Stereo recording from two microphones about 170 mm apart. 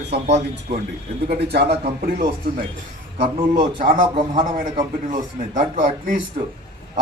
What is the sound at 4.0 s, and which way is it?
Speech, 30° right (ahead or behind).